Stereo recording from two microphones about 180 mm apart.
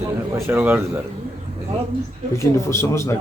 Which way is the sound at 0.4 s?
10° right (ahead or behind).